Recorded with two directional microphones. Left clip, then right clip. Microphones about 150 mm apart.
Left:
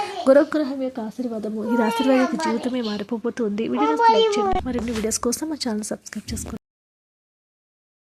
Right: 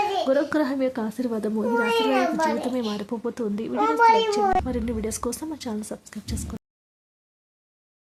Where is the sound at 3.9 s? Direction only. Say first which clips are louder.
Left 1 dB; 5° left (ahead or behind).